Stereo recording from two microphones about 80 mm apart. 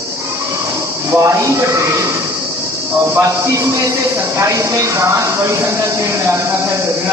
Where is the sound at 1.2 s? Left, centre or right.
Right.